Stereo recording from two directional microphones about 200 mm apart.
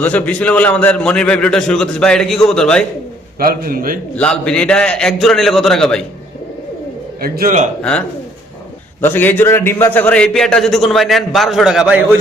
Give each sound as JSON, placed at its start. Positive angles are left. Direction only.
{"t": 0.0, "sound": "a man's voice", "side_deg": 10}
{"t": 3.3, "sound": "a man's voice", "side_deg": -45}
{"t": 4.1, "sound": "a man's voice", "side_deg": 5}
{"t": 7.2, "sound": "a man's voice", "side_deg": -45}
{"t": 7.8, "sound": "a man's voice", "side_deg": 5}